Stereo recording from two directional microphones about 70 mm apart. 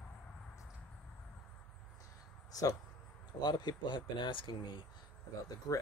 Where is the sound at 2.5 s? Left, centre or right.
Left.